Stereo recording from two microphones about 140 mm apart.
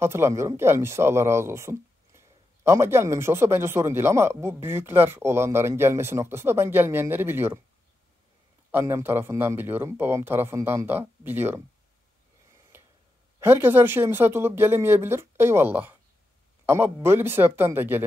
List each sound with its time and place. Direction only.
0.0 s speech: 20° right (ahead or behind)
8.7 s speech: 15° right (ahead or behind)
12.7 s a sound: 15° right (ahead or behind)
13.4 s speech: 15° right (ahead or behind)